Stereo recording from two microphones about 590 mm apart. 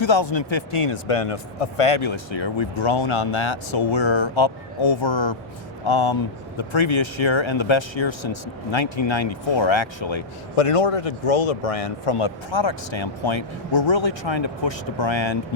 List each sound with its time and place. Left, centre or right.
0.0 s speech: left